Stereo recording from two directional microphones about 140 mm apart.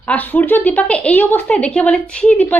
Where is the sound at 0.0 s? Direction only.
10° left (ahead or behind).